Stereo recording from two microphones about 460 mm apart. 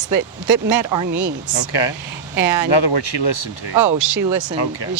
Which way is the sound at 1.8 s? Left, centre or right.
Left.